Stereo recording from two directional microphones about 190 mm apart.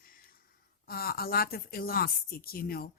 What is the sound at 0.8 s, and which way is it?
A woman's voice, 50° left (ahead or behind).